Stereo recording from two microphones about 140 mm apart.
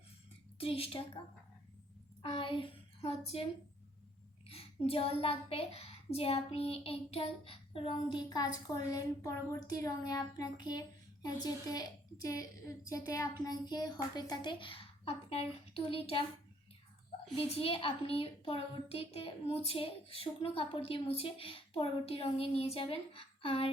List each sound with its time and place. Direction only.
0.6 s a child's voice: 40° left (ahead or behind)
2.2 s a child's voice: 35° left (ahead or behind)
4.4 s a child's voice: 45° left (ahead or behind)
17.3 s a child's voice: 45° left (ahead or behind)